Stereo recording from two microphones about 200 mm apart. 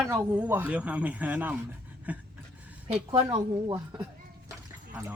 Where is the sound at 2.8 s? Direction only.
25° right (ahead or behind).